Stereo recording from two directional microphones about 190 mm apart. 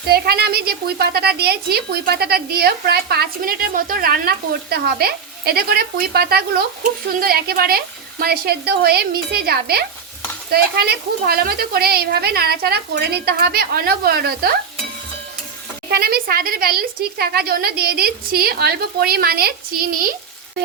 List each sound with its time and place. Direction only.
0.1 s a woman's voice: 55° right (ahead or behind)
15.9 s a woman's voice: 55° right (ahead or behind)